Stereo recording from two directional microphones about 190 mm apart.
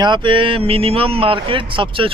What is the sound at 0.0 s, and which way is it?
Speech, 25° right (ahead or behind).